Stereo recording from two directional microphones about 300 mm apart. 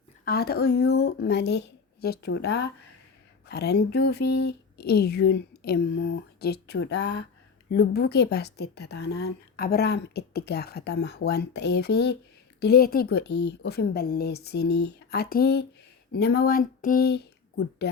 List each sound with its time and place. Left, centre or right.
0.3 s a woman's voice: left